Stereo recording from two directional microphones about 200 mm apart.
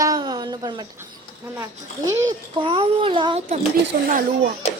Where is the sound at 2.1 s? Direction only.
20° right (ahead or behind).